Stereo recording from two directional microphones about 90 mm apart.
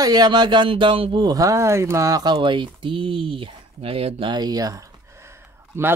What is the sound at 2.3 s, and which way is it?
Speech, 65° right (ahead or behind).